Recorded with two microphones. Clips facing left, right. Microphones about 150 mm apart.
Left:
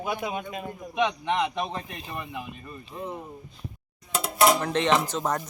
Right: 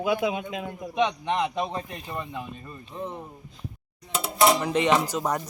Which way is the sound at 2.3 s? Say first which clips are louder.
Right 1 dB; 10° left (ahead or behind).